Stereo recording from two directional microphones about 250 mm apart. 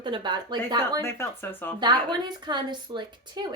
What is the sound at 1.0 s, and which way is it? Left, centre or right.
Speech, centre.